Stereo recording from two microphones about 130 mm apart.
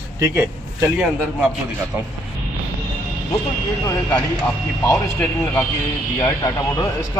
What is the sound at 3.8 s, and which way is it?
Speech, 10° left (ahead or behind).